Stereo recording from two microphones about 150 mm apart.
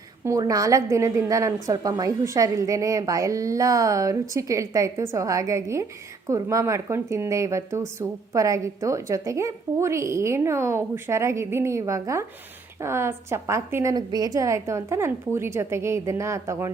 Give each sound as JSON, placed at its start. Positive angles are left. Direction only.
{"t": 0.3, "sound": "a woman's voice", "side_deg": -25}